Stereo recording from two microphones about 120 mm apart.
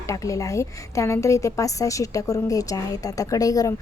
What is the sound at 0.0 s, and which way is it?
A woman's voice, 25° left (ahead or behind).